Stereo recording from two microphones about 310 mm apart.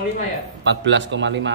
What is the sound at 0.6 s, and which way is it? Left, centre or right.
Speech, right.